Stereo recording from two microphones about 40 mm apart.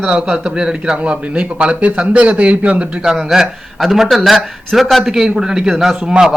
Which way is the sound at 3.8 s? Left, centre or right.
Centre.